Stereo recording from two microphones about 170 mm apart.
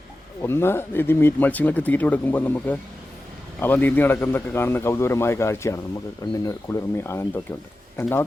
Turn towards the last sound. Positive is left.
turn(degrees=15)  # may be behind; listen again after turning